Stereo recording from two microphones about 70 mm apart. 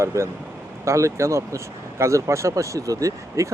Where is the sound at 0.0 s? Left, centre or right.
Right.